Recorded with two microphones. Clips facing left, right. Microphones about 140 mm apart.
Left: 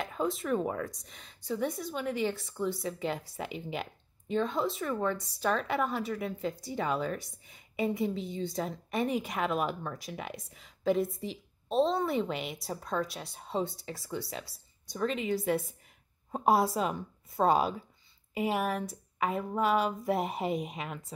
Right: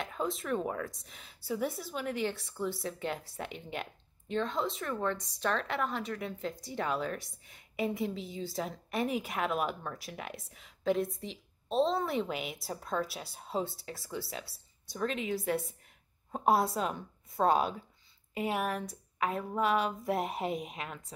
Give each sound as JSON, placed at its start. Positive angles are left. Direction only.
{"t": 0.0, "sound": "a woman's voice", "side_deg": 0}